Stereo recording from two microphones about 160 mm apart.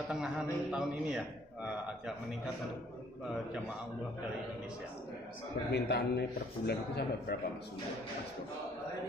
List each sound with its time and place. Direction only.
0.1 s a man's voice: 5° right (ahead or behind)
5.7 s a man's voice: 90° left